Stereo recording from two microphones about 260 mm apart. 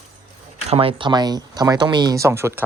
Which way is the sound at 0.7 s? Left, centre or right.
Right.